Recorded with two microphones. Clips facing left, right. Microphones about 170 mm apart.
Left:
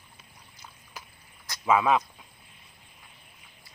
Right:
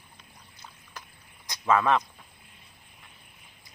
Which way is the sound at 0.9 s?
10° left (ahead or behind).